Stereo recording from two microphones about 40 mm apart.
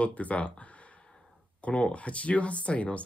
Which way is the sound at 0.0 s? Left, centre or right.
Left.